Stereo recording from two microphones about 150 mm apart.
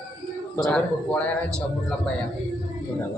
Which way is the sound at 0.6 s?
5° left (ahead or behind).